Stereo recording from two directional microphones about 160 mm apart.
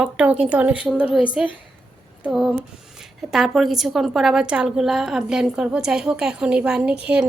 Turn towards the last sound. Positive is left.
turn(degrees=-5)  # may be behind; listen again after turning